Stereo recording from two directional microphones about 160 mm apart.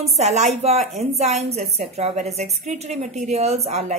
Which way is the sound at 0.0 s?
45° right (ahead or behind).